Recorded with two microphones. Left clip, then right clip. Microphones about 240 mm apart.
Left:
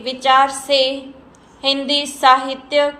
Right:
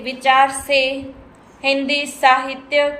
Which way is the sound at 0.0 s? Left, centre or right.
Centre.